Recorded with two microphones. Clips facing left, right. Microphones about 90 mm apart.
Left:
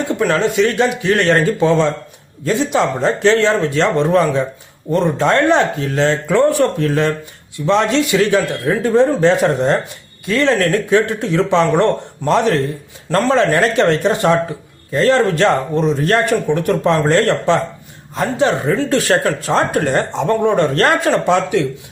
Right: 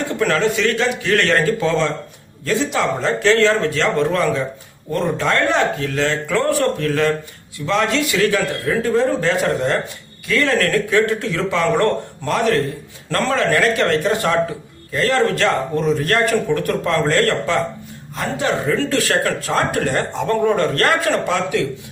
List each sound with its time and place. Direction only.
0.2 s speech: 20° left (ahead or behind)